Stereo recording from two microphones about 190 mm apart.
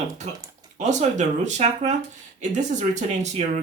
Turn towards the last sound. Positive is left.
turn(degrees=-40)  # may be behind; listen again after turning